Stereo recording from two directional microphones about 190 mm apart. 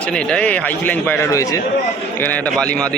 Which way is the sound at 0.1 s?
5° left (ahead or behind).